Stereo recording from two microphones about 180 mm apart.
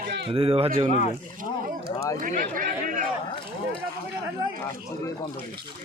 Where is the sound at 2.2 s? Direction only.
50° right (ahead or behind).